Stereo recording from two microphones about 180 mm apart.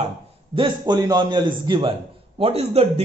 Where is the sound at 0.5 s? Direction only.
25° right (ahead or behind).